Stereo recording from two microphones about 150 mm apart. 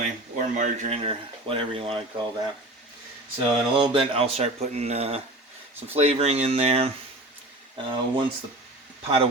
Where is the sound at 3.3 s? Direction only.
35° right (ahead or behind).